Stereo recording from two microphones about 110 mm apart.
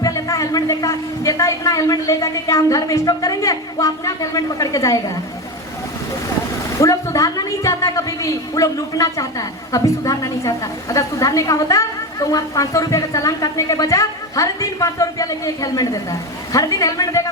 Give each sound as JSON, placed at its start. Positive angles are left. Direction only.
{"t": 0.0, "sound": "a woman's voice", "side_deg": 30}
{"t": 6.7, "sound": "a woman's voice", "side_deg": 30}